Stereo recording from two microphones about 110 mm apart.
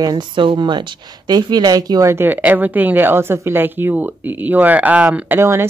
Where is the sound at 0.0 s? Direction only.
40° right (ahead or behind).